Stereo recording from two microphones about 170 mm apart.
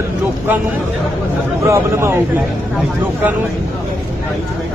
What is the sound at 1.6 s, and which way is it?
Speech, 15° right (ahead or behind).